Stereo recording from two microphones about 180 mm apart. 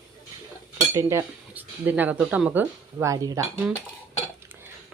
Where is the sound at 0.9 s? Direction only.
15° right (ahead or behind).